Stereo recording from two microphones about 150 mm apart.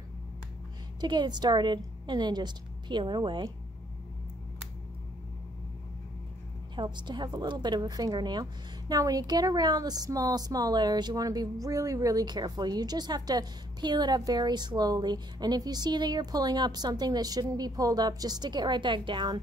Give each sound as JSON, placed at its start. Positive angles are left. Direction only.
{"t": 1.0, "sound": "a woman's voice", "side_deg": -30}
{"t": 6.7, "sound": "a woman's voice", "side_deg": -30}